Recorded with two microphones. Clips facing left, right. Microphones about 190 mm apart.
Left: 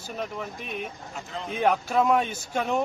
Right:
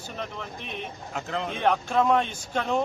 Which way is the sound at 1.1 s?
65° right (ahead or behind).